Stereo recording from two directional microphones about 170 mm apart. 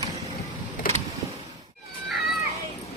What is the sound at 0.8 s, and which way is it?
Vehicle, 55° left (ahead or behind).